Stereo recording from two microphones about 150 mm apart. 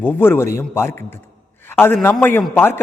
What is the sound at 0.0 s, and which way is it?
A man's voice, 15° left (ahead or behind).